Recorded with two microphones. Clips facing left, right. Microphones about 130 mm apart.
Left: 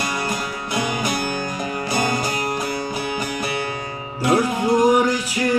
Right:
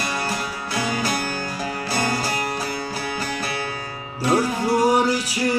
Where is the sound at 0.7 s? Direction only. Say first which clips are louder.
Left 1 dB; 20° left (ahead or behind).